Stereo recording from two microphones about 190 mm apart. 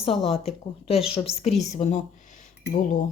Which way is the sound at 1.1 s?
30° left (ahead or behind).